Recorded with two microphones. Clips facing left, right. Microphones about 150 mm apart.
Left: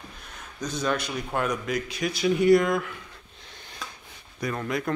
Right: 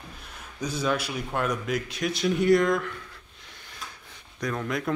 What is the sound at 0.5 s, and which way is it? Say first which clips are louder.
A man's voice: even; 5° right (ahead or behind).